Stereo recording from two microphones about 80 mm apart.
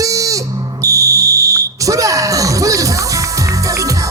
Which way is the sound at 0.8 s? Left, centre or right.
Right.